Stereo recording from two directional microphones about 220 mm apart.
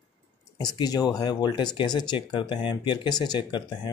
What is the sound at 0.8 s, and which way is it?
Speech, 15° left (ahead or behind).